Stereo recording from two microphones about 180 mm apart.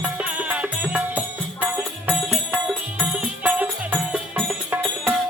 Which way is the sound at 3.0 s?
10° right (ahead or behind).